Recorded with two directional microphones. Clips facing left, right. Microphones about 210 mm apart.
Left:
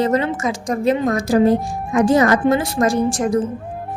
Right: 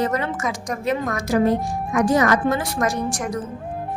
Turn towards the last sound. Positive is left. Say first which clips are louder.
# left 8 dB
turn(degrees=25)  # may be behind; listen again after turning